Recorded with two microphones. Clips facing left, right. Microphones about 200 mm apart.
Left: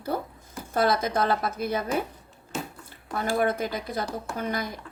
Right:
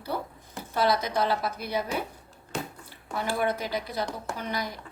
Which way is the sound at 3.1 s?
50° left (ahead or behind).